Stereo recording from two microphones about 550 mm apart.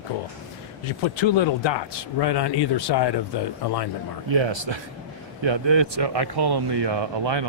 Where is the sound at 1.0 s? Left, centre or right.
Left.